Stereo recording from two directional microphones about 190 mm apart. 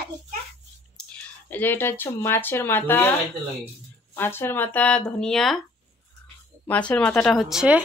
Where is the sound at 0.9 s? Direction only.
5° left (ahead or behind).